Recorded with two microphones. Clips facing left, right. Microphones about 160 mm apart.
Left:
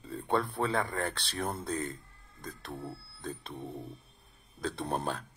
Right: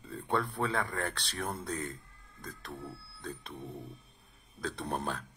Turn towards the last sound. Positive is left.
turn(degrees=30)  # may be behind; listen again after turning